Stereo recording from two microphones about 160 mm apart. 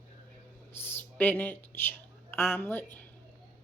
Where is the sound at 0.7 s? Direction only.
15° left (ahead or behind).